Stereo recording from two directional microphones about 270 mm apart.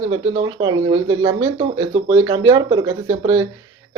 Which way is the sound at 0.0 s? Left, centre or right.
Centre.